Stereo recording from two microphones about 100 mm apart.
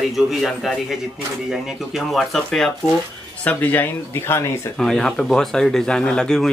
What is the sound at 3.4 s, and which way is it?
Speech, 15° left (ahead or behind).